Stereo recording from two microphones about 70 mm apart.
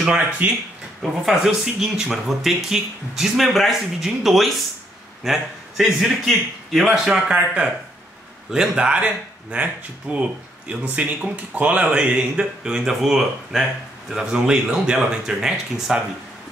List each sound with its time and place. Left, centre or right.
0.0 s speech: centre
1.0 s a man's voice: centre
7.1 s a man's voice: centre